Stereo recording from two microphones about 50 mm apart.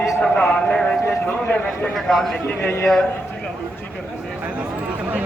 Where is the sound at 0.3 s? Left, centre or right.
Left.